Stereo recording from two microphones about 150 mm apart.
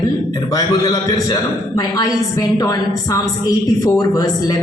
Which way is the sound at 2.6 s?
25° left (ahead or behind).